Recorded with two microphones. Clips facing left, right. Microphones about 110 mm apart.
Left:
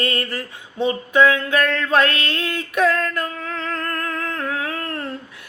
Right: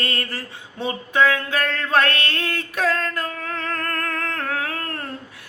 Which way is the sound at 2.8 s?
30° right (ahead or behind).